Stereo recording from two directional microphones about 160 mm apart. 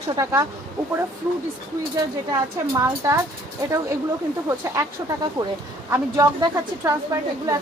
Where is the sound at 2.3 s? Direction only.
20° right (ahead or behind).